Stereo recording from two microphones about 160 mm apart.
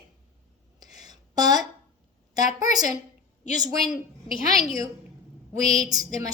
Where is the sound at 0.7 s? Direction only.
25° right (ahead or behind).